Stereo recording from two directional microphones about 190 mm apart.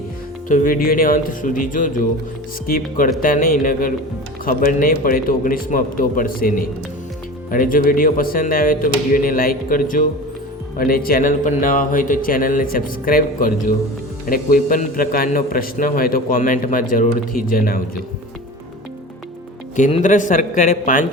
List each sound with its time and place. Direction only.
0.4 s a man's voice: 45° left (ahead or behind)
19.7 s a man's voice: 40° left (ahead or behind)